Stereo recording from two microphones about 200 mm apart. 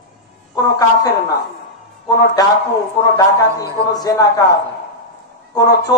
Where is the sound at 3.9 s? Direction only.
20° left (ahead or behind).